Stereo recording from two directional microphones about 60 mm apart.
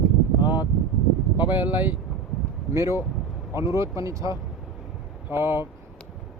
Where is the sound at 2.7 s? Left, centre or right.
Right.